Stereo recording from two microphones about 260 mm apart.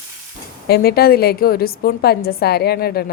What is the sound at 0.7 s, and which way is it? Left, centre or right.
A woman's voice, left.